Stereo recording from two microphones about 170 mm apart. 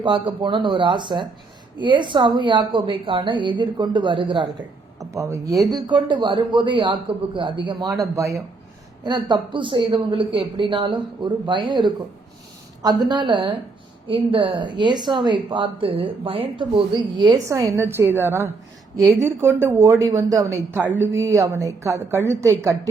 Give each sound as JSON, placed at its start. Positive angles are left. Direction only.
{"t": 0.0, "sound": "speech", "side_deg": -30}
{"t": 4.9, "sound": "a woman's voice", "side_deg": -20}
{"t": 12.8, "sound": "a woman's voice", "side_deg": -25}